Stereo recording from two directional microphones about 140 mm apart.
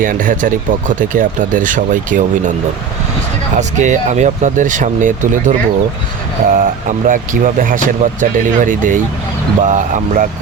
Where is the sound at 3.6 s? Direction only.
60° right (ahead or behind).